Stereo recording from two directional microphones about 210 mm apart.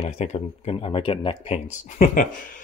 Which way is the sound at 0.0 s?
30° left (ahead or behind).